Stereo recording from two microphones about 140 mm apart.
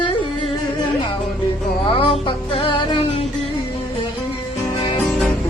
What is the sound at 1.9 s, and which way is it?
Music, 40° left (ahead or behind).